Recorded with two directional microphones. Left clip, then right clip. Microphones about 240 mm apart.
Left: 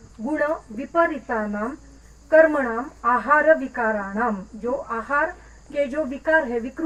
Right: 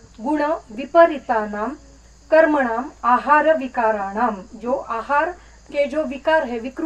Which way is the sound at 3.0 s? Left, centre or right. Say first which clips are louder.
Right 3 dB; right.